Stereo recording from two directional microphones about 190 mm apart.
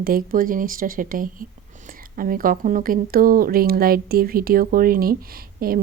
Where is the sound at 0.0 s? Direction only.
50° right (ahead or behind).